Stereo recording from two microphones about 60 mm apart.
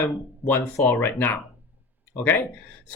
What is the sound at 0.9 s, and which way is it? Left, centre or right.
Speech, left.